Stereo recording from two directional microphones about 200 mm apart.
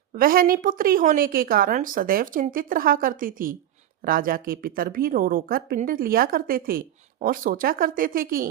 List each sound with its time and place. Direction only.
0.2 s a woman's voice: 45° right (ahead or behind)